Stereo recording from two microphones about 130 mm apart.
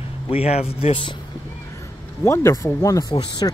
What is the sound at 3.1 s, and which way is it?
Speech, 35° left (ahead or behind).